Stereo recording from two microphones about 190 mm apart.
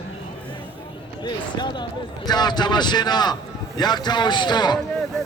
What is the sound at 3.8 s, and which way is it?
Speech, 20° left (ahead or behind).